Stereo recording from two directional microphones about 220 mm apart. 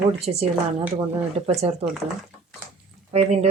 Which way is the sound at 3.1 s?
30° right (ahead or behind).